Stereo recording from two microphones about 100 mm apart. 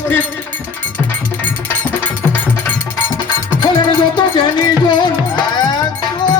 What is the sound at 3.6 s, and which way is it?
Music, 45° left (ahead or behind).